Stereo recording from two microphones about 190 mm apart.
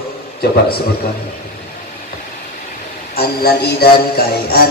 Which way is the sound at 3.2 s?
55° left (ahead or behind).